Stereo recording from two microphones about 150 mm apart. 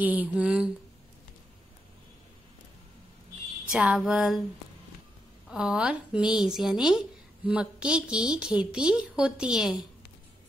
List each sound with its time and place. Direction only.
0.0 s a woman's voice: 10° right (ahead or behind)
3.7 s a woman's voice: 5° right (ahead or behind)
5.5 s a woman's voice: 5° right (ahead or behind)